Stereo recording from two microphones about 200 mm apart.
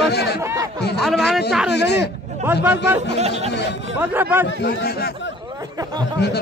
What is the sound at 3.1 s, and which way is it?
Speech, 30° right (ahead or behind).